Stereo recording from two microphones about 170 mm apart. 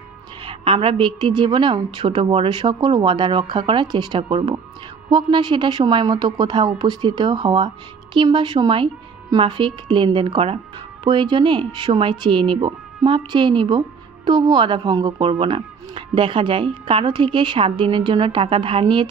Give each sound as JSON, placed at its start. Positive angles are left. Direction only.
{"t": 0.5, "sound": "speech", "side_deg": -30}